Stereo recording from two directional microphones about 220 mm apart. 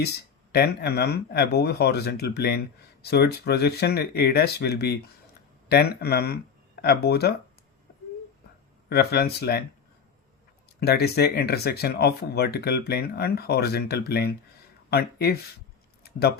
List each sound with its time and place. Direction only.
0.0 s speech: 45° left (ahead or behind)
8.9 s speech: 45° left (ahead or behind)
10.8 s speech: 45° left (ahead or behind)